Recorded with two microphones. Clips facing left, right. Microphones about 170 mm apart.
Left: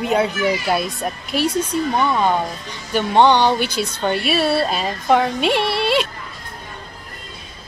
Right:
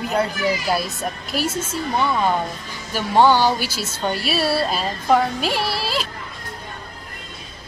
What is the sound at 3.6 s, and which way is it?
A woman's voice, 5° right (ahead or behind).